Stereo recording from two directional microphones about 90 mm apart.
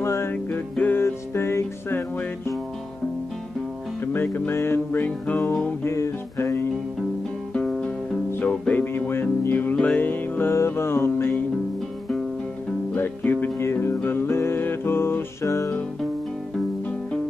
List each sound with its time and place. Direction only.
0.0 s music: 30° left (ahead or behind)
0.3 s music: 20° left (ahead or behind)
4.0 s music: 25° left (ahead or behind)
5.9 s music: 30° left (ahead or behind)
7.5 s music: 10° left (ahead or behind); by 11.4 s 25° left (ahead or behind)
12.9 s music: 20° left (ahead or behind); by 15.7 s 35° left (ahead or behind)